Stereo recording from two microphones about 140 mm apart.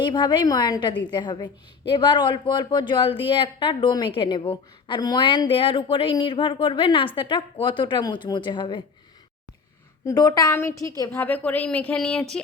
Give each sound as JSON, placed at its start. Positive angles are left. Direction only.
{"t": 0.0, "sound": "speech", "side_deg": 30}
{"t": 10.1, "sound": "a woman's voice", "side_deg": 25}